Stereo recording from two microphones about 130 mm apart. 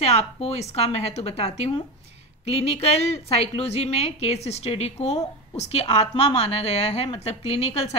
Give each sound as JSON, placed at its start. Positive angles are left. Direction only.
{"t": 0.0, "sound": "a woman's voice", "side_deg": 55}